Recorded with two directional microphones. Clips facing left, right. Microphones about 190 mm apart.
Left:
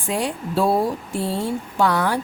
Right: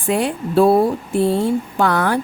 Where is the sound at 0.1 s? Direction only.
60° right (ahead or behind).